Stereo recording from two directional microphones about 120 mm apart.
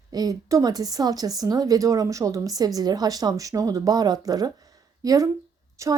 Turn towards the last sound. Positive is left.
turn(degrees=-25)  # may be behind; listen again after turning